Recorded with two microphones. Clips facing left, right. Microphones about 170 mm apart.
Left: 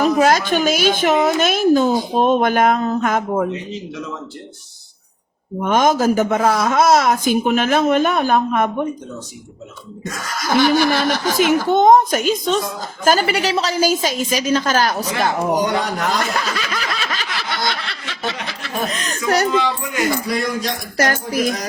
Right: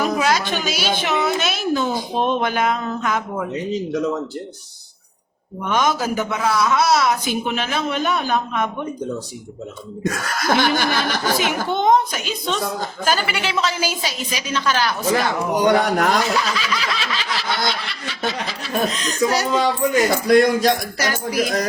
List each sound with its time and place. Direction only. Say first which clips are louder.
0.0 s a sound: left 5 dB; 45° left (ahead or behind)
0.5 s a man's voice: left 6 dB; 50° left (ahead or behind)
3.7 s speech: right 7 dB; 40° right (ahead or behind)
5.5 s a man's voice: left 5 dB; 45° left (ahead or behind)
10.4 s speech: left 4 dB; 55° right (ahead or behind)
11.3 s a man's voice: left 7 dB; 45° left (ahead or behind)
15.6 s speech: right 4 dB; 60° right (ahead or behind)
16.2 s snicker: right 1 dB; 55° left (ahead or behind)
18.3 s speech: right 1 dB; 60° left (ahead or behind)
19.6 s a man's voice: right 3 dB; 40° right (ahead or behind)
21.0 s a man's voice: left 3 dB; 50° left (ahead or behind)